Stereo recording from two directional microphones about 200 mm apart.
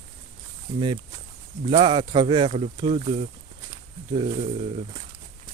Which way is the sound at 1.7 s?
25° right (ahead or behind).